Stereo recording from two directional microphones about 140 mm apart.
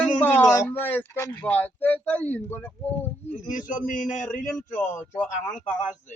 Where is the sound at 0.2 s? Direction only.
15° left (ahead or behind).